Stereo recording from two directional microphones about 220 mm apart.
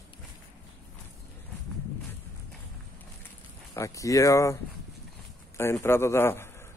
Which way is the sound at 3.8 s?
15° left (ahead or behind).